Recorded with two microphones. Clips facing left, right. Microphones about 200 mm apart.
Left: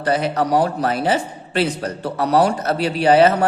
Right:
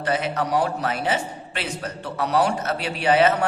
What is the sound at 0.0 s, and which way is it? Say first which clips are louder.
Speech: left 5 dB; 35° left (ahead or behind).